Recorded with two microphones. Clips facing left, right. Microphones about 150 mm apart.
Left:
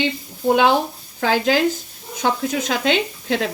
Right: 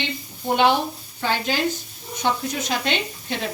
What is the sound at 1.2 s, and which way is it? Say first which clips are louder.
Speech: left 5 dB; 90° left.